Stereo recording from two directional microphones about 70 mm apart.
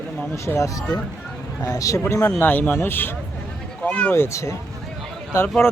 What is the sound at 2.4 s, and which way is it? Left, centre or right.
Speech, left.